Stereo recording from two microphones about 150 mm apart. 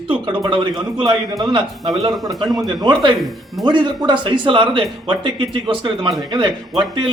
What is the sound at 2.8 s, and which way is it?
Speech, 30° right (ahead or behind).